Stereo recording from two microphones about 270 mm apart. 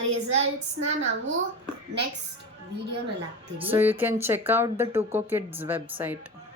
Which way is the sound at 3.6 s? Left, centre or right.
Centre.